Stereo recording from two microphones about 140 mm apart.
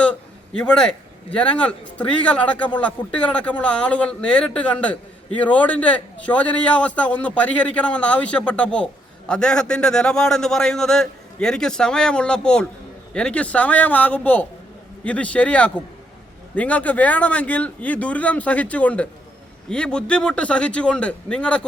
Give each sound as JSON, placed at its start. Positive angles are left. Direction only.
{"t": 0.0, "sound": "a man's voice", "side_deg": 10}